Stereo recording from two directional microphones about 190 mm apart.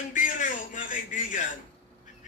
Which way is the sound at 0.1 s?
40° left (ahead or behind).